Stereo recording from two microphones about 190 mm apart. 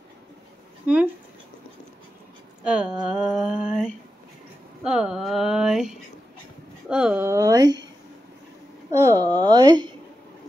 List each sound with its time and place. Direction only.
0.8 s speech: 10° right (ahead or behind)
2.6 s speech: 5° right (ahead or behind); by 7.8 s 20° right (ahead or behind)
9.0 s speech: 20° right (ahead or behind)